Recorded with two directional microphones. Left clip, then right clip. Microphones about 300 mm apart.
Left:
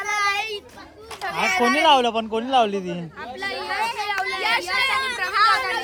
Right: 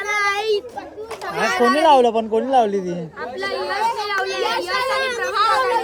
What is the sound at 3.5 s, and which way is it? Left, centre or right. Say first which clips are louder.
Chatter: right 4 dB; centre.